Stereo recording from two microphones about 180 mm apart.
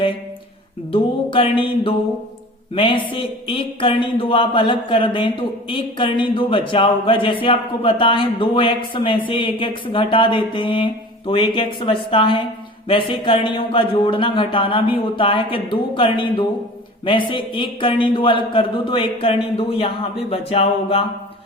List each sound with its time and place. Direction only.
0.9 s music: 30° left (ahead or behind)
2.7 s speech: 25° left (ahead or behind)
20.3 s a sound: 30° left (ahead or behind)